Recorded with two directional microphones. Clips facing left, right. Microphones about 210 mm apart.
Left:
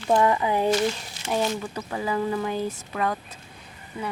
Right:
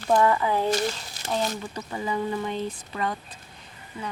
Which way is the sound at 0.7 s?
40° right (ahead or behind).